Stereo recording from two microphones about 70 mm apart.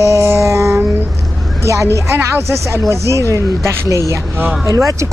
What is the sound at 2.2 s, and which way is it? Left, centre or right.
A woman's voice, right.